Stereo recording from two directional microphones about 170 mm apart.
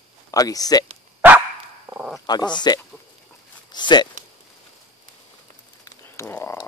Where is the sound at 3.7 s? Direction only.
25° left (ahead or behind).